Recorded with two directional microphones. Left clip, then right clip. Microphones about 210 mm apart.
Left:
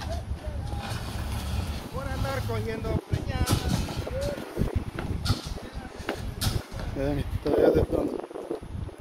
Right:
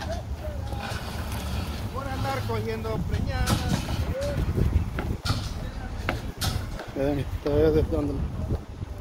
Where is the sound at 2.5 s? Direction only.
55° right (ahead or behind).